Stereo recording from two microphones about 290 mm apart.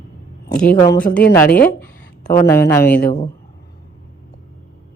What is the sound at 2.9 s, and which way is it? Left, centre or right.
Speech, left.